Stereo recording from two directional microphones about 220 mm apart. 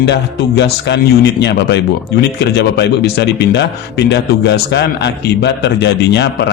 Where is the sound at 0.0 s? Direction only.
50° left (ahead or behind).